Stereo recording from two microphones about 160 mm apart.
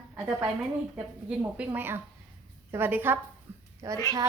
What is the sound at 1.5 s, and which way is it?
A woman's voice, 10° right (ahead or behind).